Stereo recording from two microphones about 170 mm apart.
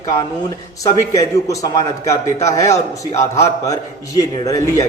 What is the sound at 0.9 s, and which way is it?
A man's voice, 20° left (ahead or behind).